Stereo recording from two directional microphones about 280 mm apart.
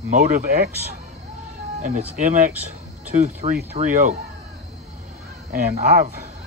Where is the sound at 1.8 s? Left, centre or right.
Right.